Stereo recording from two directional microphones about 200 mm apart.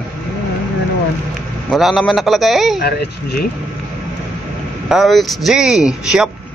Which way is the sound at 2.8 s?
50° left (ahead or behind).